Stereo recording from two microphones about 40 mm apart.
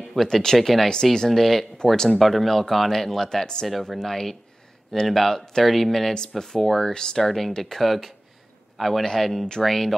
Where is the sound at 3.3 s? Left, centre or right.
Centre.